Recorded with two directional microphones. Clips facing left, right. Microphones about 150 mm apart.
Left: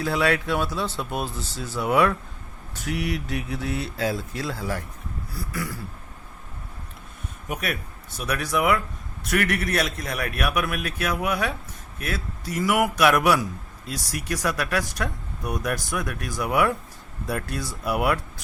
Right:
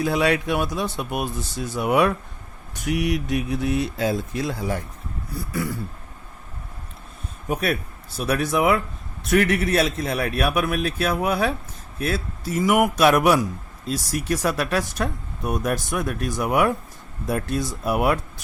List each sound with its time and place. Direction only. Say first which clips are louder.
0.0 s speech: right 2 dB; 20° right (ahead or behind)
7.4 s a man's voice: right 6 dB; 35° right (ahead or behind)